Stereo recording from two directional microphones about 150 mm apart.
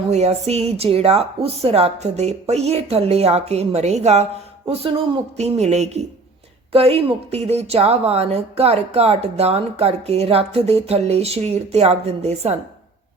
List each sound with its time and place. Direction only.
0.1 s speech: 45° right (ahead or behind)